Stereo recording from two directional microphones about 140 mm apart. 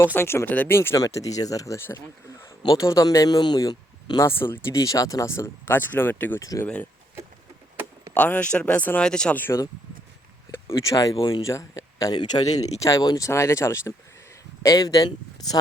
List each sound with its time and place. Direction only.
0.0 s speech: 15° left (ahead or behind)
4.3 s speech: 15° left (ahead or behind)
8.1 s speech: 10° left (ahead or behind); by 15.5 s 25° left (ahead or behind)